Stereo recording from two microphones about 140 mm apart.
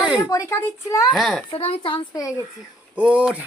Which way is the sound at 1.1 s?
5° left (ahead or behind).